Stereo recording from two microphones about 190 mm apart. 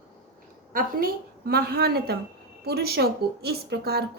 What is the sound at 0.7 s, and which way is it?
A woman's voice, 50° right (ahead or behind).